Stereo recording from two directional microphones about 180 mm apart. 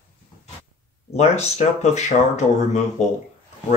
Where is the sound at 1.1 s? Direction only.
40° left (ahead or behind).